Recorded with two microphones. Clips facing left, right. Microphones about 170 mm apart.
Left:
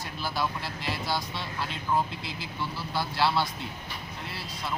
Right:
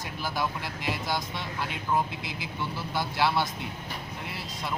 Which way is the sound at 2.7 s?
20° right (ahead or behind).